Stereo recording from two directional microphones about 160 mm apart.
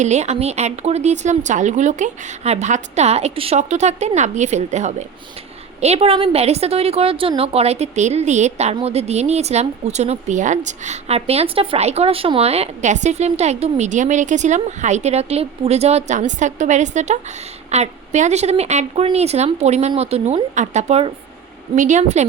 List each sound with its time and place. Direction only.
0.0 s a woman's voice: 45° right (ahead or behind)